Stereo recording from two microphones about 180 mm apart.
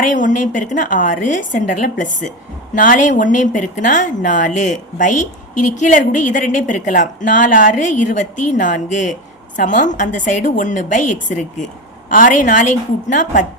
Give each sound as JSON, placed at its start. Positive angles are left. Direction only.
{"t": 0.0, "sound": "speech", "side_deg": 45}